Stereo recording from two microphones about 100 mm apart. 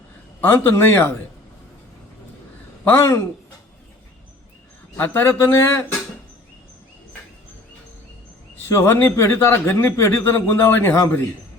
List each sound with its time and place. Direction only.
0.4 s speech: 25° left (ahead or behind)
2.8 s speech: 25° left (ahead or behind)
4.9 s speech: 20° left (ahead or behind)
8.5 s speech: 25° left (ahead or behind)